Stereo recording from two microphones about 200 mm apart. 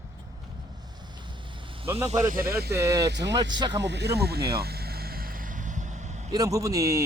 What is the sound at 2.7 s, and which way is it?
Speech, 15° right (ahead or behind).